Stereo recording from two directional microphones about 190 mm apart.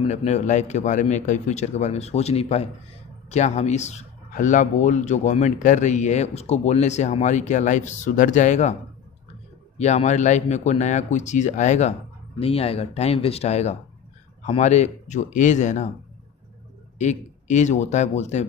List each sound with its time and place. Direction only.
0.0 s speech: 35° left (ahead or behind)
9.8 s speech: 35° left (ahead or behind)
17.0 s speech: 40° left (ahead or behind)